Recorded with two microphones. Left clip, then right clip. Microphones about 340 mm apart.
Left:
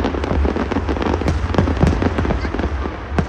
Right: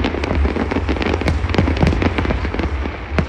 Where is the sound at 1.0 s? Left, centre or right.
Centre.